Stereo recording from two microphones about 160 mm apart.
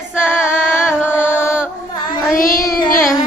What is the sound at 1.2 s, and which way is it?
Music, 15° left (ahead or behind).